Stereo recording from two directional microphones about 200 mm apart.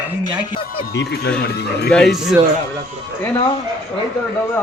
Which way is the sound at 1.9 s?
Centre (ahead or behind).